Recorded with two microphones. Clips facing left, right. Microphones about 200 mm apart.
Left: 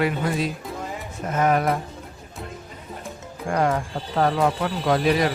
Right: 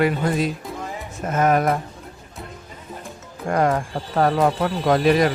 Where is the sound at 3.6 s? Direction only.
50° right (ahead or behind).